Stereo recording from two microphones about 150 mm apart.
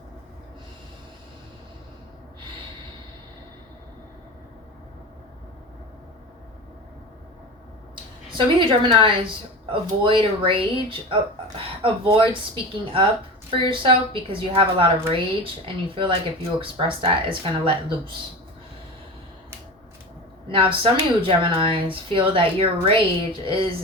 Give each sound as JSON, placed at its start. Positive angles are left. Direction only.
{"t": 8.3, "sound": "speech", "side_deg": -30}
{"t": 20.5, "sound": "speech", "side_deg": -35}